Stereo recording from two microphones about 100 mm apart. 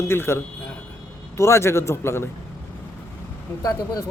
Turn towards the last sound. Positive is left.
turn(degrees=35)  # may be behind; listen again after turning